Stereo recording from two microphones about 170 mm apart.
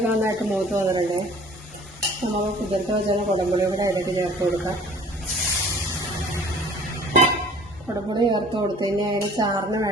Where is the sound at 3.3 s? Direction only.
25° right (ahead or behind).